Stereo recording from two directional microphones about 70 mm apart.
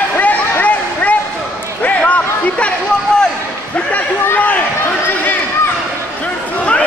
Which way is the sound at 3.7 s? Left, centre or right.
Left.